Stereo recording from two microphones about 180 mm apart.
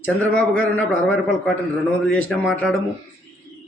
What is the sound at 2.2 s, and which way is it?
Speech, 5° left (ahead or behind).